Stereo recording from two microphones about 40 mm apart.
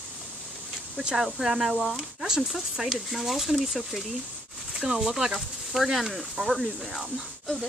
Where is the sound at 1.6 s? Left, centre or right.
Centre.